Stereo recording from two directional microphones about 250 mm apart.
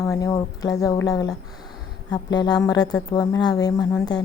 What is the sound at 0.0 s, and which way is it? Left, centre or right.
Speech, centre.